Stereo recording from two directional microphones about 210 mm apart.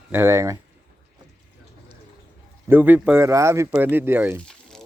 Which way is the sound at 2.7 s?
10° right (ahead or behind).